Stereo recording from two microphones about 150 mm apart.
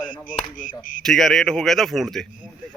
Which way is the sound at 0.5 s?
60° left (ahead or behind).